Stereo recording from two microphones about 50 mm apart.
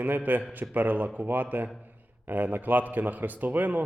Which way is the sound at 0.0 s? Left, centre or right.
Right.